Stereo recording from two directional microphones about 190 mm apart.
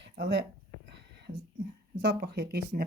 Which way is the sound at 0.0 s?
65° right (ahead or behind).